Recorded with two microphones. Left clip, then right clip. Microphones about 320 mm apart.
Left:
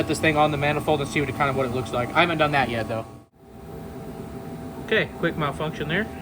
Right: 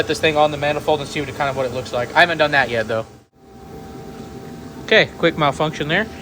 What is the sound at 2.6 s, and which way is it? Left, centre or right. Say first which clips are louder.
Speech: right 6 dB; right.